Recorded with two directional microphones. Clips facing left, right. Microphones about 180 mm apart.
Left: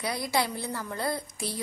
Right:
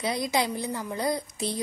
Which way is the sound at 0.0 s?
20° right (ahead or behind).